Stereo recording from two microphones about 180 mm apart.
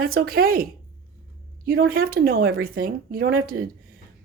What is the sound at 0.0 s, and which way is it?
A woman's voice, 55° right (ahead or behind).